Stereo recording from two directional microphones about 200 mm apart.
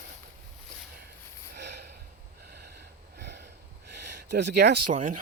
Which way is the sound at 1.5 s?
55° right (ahead or behind).